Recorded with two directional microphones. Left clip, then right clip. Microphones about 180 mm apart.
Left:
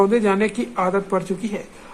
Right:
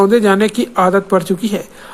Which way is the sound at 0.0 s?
30° right (ahead or behind).